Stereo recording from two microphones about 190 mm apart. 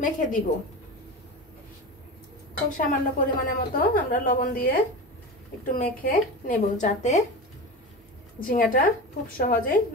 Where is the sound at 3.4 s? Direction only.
45° left (ahead or behind).